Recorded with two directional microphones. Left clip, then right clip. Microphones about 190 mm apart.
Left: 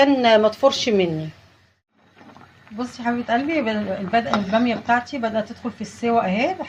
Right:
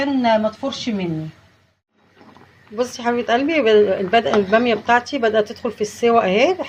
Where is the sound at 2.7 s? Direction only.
45° right (ahead or behind).